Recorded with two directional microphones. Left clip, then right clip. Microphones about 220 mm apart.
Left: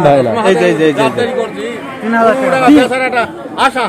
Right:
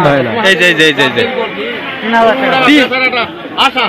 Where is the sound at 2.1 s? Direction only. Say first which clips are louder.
Right 1 dB; 35° left (ahead or behind).